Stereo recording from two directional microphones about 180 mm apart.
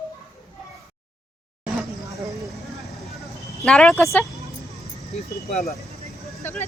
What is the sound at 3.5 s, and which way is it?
Speech, 5° left (ahead or behind).